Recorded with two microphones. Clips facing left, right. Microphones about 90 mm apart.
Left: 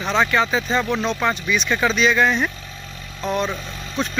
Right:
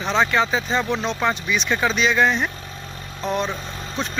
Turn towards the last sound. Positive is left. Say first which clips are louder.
# left 2 dB
turn(degrees=-20)  # may be behind; listen again after turning